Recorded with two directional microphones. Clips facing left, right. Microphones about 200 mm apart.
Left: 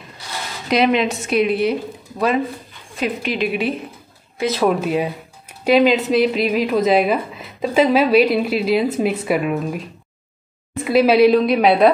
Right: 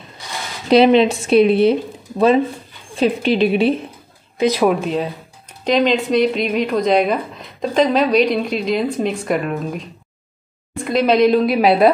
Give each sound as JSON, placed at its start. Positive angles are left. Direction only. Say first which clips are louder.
{"t": 0.7, "sound": "a woman's voice", "louder": "right 6 dB", "side_deg": -30}
{"t": 4.4, "sound": "speech", "louder": "right 4 dB", "side_deg": -15}
{"t": 4.6, "sound": "speech", "louder": "even", "side_deg": 5}